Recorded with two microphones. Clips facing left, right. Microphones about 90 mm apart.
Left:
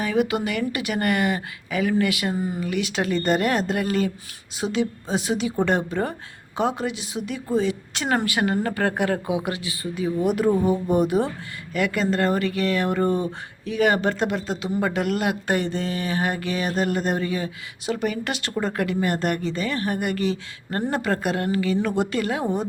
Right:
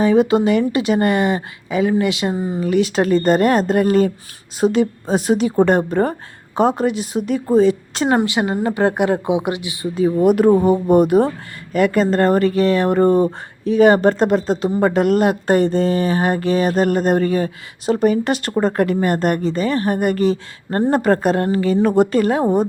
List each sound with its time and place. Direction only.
0.0 s speech: 30° right (ahead or behind)
2.6 s a woman's voice: 35° right (ahead or behind)
8.1 s speech: 20° right (ahead or behind)
10.2 s speech: 55° right (ahead or behind)
11.7 s speech: 40° right (ahead or behind)